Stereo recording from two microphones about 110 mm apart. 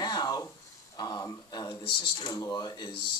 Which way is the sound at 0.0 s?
35° left (ahead or behind).